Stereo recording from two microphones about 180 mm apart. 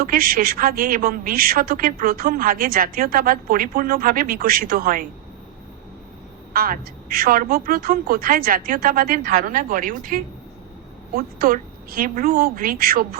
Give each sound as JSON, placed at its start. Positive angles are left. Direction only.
{"t": 0.0, "sound": "a woman's voice", "side_deg": -55}
{"t": 6.5, "sound": "a woman's voice", "side_deg": -55}